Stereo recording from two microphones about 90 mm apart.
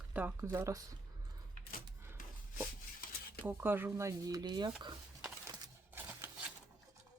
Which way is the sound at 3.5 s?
25° right (ahead or behind).